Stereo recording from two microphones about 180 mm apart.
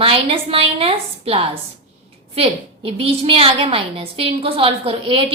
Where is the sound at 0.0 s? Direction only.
30° right (ahead or behind).